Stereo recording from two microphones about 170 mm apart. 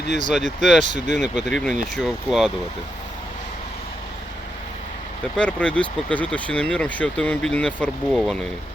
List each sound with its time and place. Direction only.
0.1 s speech: 45° right (ahead or behind)
0.3 s speech: centre (ahead or behind)
5.4 s speech: 5° left (ahead or behind)